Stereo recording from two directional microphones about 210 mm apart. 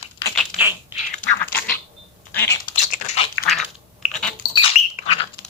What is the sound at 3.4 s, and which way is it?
Typing, centre (ahead or behind).